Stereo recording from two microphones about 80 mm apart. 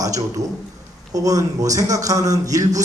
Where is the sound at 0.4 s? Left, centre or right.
Right.